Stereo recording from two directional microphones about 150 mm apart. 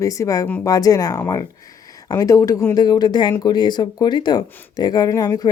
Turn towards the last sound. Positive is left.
turn(degrees=25)  # may be behind; listen again after turning